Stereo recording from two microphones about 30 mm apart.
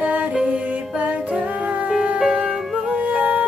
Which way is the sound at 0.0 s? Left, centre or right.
Right.